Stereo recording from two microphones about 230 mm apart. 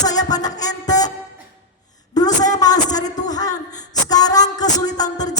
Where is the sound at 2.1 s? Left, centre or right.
Centre.